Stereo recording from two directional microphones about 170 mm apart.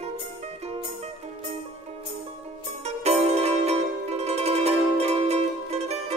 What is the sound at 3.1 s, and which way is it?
Zither, 40° right (ahead or behind).